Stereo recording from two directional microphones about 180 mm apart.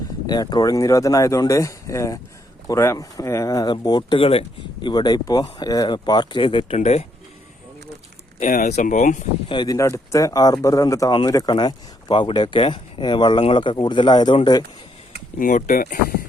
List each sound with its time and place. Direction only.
0.3 s speech: 20° left (ahead or behind); by 7.1 s 40° left (ahead or behind)
8.4 s speech: 45° left (ahead or behind)
9.5 s speech: 25° left (ahead or behind)
15.4 s speech: 50° left (ahead or behind)